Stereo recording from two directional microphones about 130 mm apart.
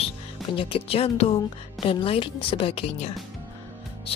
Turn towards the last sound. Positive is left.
turn(degrees=45)  # may be behind; listen again after turning